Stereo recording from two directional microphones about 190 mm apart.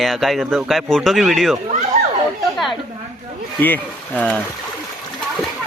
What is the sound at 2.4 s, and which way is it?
Chatter, centre (ahead or behind).